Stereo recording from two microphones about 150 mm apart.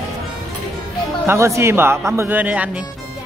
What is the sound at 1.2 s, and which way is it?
Speech, 20° right (ahead or behind).